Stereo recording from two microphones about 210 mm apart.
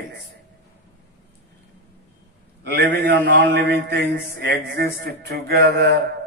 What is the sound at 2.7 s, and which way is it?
A man's voice, 55° right (ahead or behind).